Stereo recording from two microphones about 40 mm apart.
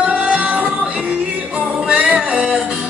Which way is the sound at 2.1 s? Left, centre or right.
Right.